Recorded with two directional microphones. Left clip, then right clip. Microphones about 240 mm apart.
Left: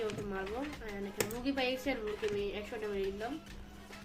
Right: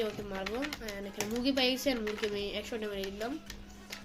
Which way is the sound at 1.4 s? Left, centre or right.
Right.